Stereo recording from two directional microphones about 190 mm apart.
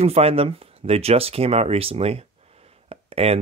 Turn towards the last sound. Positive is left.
turn(degrees=-30)  # may be behind; listen again after turning